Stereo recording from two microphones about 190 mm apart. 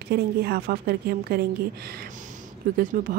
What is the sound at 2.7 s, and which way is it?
Speech, 45° right (ahead or behind).